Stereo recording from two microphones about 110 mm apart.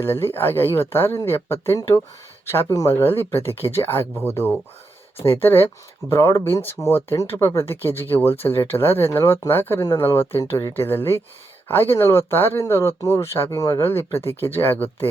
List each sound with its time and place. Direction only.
0.0 s speech: 20° left (ahead or behind)